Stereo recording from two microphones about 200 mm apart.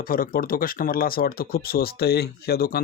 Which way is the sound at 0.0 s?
45° left (ahead or behind).